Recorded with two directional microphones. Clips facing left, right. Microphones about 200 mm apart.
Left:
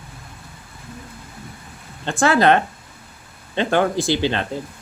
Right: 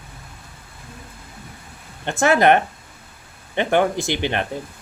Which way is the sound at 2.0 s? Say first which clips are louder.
Even; 20° right (ahead or behind).